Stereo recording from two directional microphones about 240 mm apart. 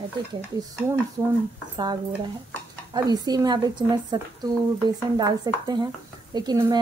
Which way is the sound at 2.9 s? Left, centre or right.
Centre.